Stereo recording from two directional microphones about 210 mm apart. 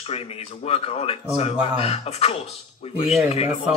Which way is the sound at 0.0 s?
30° left (ahead or behind).